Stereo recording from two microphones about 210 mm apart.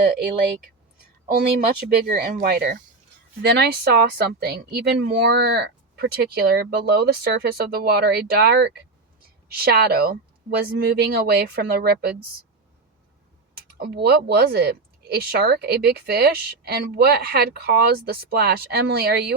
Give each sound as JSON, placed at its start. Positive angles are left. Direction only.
{"t": 1.4, "sound": "speech", "side_deg": -45}
{"t": 13.7, "sound": "speech", "side_deg": -50}